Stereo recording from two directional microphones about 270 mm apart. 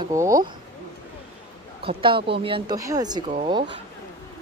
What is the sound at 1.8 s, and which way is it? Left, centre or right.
A man's voice, centre.